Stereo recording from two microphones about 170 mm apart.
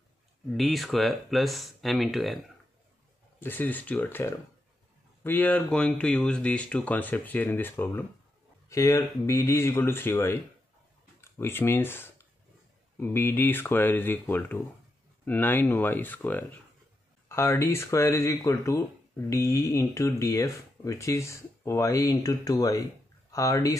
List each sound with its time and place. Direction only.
0.5 s speech: centre (ahead or behind)
3.3 s speech: 10° left (ahead or behind)